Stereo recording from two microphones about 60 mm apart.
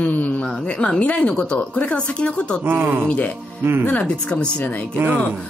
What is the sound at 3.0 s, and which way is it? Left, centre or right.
Speech, left.